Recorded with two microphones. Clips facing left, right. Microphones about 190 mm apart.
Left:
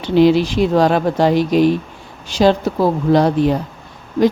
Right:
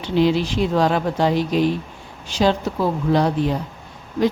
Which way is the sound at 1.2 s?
70° left (ahead or behind).